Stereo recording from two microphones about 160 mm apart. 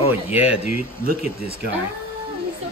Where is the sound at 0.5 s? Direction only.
5° right (ahead or behind).